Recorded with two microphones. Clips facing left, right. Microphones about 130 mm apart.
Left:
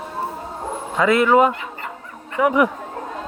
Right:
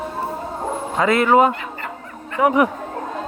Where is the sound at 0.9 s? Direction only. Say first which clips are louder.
Even; 35° right (ahead or behind).